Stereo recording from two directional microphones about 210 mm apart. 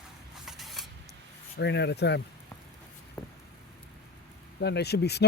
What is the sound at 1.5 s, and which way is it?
Speech, 55° left (ahead or behind).